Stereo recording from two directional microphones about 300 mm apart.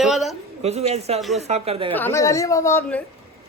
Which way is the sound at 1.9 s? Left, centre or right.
Centre.